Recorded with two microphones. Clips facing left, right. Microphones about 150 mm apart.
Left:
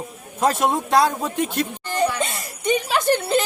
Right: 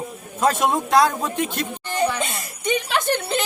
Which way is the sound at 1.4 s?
Centre (ahead or behind).